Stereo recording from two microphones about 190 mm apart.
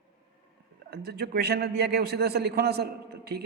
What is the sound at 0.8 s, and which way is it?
A man's voice, 55° right (ahead or behind).